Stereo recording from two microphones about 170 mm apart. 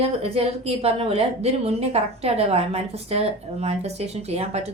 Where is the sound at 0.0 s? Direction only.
35° right (ahead or behind).